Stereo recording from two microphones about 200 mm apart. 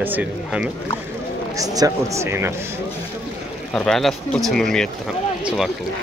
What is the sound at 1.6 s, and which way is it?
Speech, 15° right (ahead or behind).